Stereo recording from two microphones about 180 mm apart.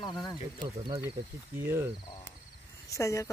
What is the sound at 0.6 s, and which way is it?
Speech, 25° right (ahead or behind).